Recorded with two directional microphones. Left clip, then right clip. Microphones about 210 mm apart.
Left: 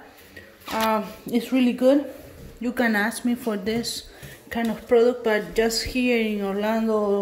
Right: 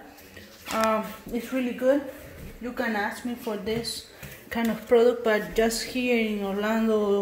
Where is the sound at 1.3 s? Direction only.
35° left (ahead or behind).